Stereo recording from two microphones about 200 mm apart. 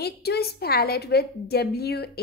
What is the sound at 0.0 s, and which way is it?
A woman's voice, 55° left (ahead or behind).